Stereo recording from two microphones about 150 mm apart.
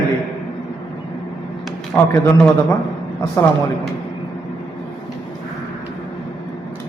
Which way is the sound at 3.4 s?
20° left (ahead or behind).